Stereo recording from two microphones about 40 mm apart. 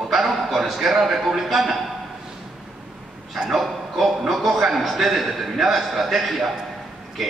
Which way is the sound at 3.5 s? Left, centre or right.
Centre.